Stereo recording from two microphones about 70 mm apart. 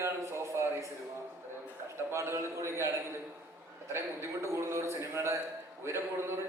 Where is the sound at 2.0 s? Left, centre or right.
Right.